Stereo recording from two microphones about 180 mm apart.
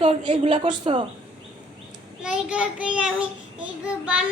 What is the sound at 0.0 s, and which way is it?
A woman's voice, 30° right (ahead or behind).